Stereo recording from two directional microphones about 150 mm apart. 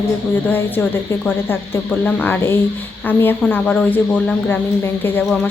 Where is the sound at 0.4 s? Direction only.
15° left (ahead or behind).